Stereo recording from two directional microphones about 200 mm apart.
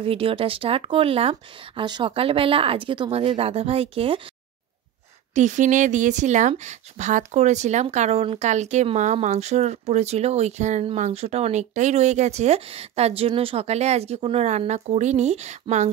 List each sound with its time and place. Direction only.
0.0 s speech: 25° right (ahead or behind)
5.3 s a woman's voice: 35° right (ahead or behind)